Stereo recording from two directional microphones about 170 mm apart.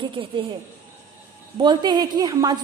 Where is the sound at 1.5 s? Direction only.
25° right (ahead or behind).